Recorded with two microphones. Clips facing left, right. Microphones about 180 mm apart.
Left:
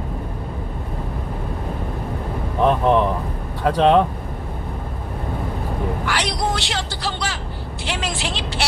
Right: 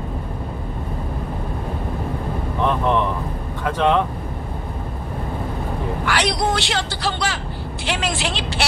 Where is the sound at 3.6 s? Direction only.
35° left (ahead or behind).